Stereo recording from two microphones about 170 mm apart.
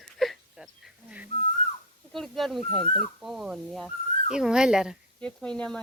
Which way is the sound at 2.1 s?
Centre (ahead or behind).